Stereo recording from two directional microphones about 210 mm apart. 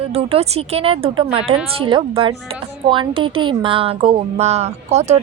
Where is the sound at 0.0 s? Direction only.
30° right (ahead or behind).